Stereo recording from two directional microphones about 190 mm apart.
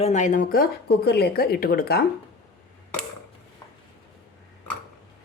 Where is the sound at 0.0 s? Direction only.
40° left (ahead or behind).